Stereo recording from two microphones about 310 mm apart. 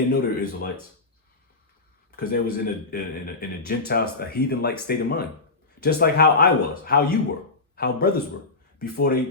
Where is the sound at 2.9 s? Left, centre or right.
Left.